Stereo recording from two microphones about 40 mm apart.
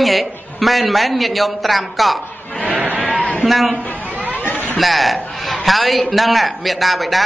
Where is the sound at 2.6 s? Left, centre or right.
Right.